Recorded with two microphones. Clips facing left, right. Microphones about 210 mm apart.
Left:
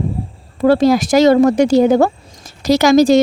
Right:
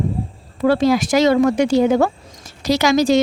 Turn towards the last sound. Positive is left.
turn(degrees=40)  # may be behind; listen again after turning